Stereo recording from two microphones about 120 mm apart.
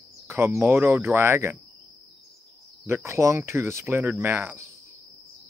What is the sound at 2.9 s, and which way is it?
Speech, 25° right (ahead or behind).